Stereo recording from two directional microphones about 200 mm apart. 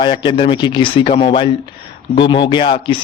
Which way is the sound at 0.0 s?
25° left (ahead or behind).